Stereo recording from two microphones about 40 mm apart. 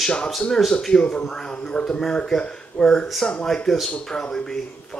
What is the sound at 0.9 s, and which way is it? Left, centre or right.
Speech, left.